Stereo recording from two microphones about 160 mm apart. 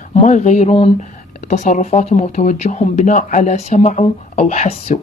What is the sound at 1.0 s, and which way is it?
Speech, 50° left (ahead or behind).